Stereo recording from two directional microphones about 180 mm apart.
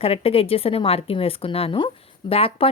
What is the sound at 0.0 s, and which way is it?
Speech, 35° left (ahead or behind).